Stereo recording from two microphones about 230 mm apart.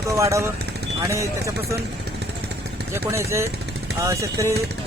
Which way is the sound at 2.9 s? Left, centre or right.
Centre.